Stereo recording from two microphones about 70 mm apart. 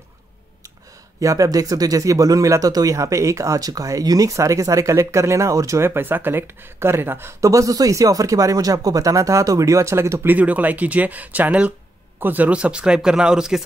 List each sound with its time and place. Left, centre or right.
1.2 s speech: right
5.9 s speech: right
10.2 s speech: right